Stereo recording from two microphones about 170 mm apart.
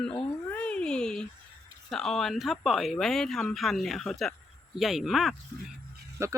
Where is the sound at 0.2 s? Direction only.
10° left (ahead or behind).